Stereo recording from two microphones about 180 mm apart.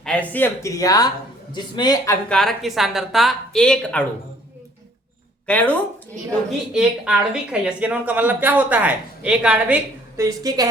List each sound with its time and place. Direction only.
0.0 s a man's voice: 5° left (ahead or behind); by 2.1 s 20° left (ahead or behind)
2.3 s speech: centre (ahead or behind)
5.5 s speech: 10° left (ahead or behind)
6.7 s a woman's voice: 5° right (ahead or behind); by 10.7 s 20° right (ahead or behind)